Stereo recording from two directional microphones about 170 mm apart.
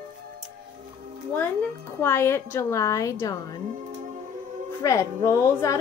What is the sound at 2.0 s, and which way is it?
A woman's voice, 15° left (ahead or behind).